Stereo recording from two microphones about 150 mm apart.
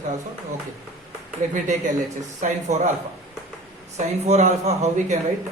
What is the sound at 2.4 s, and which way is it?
Speech, 55° right (ahead or behind).